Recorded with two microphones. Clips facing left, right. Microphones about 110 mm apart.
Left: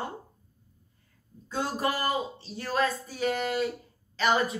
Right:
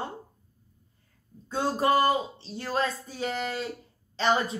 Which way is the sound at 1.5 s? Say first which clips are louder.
Right 5 dB; 30° right (ahead or behind).